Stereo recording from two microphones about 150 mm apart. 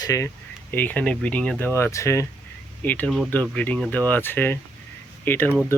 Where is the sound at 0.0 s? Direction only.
20° left (ahead or behind).